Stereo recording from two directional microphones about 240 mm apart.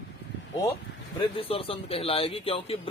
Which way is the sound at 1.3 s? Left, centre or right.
Left.